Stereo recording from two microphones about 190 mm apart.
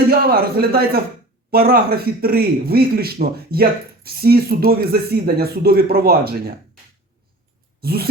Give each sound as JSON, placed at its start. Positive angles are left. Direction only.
{"t": 0.1, "sound": "a man's voice", "side_deg": -50}
{"t": 7.8, "sound": "speech", "side_deg": -55}